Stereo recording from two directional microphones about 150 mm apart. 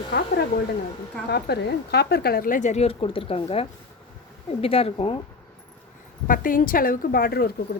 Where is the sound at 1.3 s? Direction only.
90° left; by 5.2 s 40° left (ahead or behind).